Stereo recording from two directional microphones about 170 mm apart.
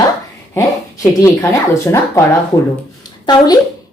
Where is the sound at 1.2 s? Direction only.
15° left (ahead or behind).